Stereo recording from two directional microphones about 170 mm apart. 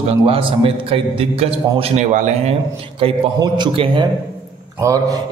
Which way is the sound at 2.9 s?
30° right (ahead or behind).